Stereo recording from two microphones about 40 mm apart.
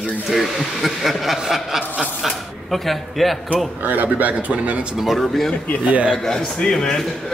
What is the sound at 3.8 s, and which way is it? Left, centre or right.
A man's voice, right.